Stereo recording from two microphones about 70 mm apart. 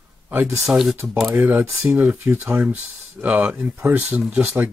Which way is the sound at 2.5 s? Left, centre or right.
Right.